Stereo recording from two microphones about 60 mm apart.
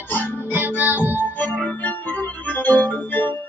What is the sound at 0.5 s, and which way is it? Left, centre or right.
Music, right.